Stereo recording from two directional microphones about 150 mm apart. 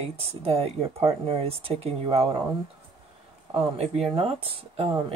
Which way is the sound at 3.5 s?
40° right (ahead or behind).